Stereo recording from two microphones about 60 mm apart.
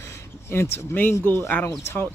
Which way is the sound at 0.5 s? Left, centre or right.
Left.